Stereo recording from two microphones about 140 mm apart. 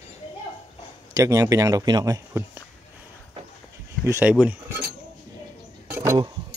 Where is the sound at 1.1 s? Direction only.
25° right (ahead or behind).